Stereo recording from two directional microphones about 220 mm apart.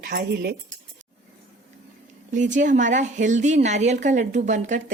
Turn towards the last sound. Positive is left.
turn(degrees=-35)  # may be behind; listen again after turning